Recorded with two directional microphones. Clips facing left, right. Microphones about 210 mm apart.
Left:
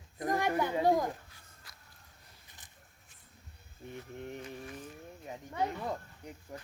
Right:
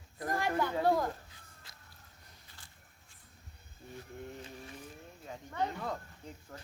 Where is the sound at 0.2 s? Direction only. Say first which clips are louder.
Left 2 dB; 20° left (ahead or behind).